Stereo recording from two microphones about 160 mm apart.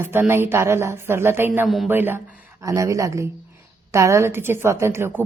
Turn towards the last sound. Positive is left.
turn(degrees=-15)  # may be behind; listen again after turning